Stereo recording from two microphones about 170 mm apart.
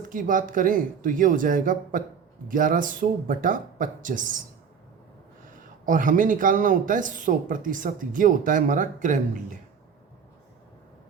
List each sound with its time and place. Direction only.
0.1 s speech: 50° right (ahead or behind)
5.8 s speech: 50° right (ahead or behind)